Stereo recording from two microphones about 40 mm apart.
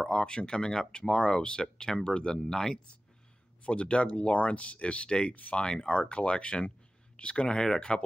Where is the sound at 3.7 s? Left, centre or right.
Left.